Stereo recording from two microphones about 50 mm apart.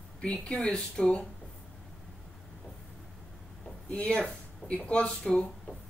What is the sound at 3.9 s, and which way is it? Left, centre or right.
Speech, left.